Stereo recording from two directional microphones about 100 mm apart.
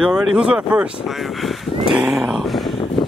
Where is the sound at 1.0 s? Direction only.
Centre (ahead or behind).